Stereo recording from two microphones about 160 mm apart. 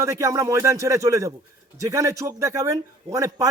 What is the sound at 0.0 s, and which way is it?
A man's voice, 20° right (ahead or behind).